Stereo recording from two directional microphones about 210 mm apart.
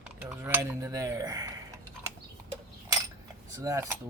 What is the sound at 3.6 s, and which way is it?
Speech, 15° right (ahead or behind).